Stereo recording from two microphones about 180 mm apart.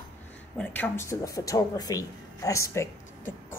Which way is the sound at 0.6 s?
10° left (ahead or behind).